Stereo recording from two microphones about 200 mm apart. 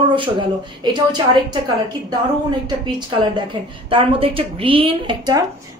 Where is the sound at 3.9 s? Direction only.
30° right (ahead or behind).